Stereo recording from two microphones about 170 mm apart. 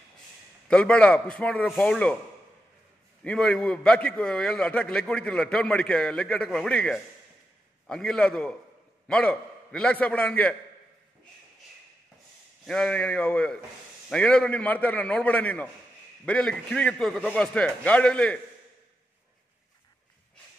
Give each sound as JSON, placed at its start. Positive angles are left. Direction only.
{"t": 0.7, "sound": "a man's voice", "side_deg": 5}
{"t": 3.3, "sound": "a man's voice", "side_deg": 5}
{"t": 12.6, "sound": "a man's voice", "side_deg": 5}